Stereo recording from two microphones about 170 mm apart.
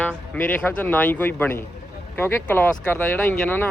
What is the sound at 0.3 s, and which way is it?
Speech, 10° left (ahead or behind).